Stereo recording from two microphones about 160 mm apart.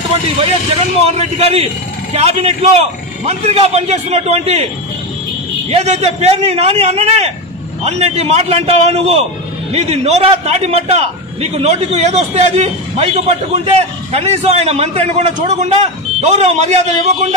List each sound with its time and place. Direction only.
1.0 s a man's voice: 40° right (ahead or behind)
5.7 s a man's voice: 40° right (ahead or behind)